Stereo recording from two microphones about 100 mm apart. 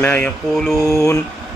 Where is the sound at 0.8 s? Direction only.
30° left (ahead or behind).